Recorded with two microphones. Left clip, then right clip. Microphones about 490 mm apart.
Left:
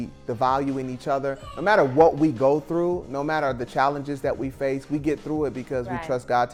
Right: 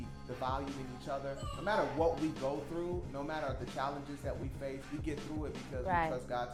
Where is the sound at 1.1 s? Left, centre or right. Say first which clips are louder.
Left 14 dB; left.